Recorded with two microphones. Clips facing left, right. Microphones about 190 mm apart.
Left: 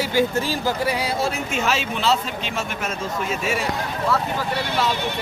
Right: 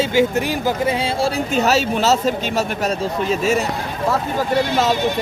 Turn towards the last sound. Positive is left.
turn(degrees=-45)  # may be behind; listen again after turning